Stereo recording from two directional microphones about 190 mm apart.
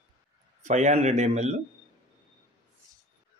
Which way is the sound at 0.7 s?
35° right (ahead or behind).